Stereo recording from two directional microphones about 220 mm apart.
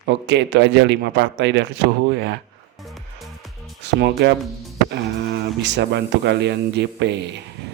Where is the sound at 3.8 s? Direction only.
50° right (ahead or behind).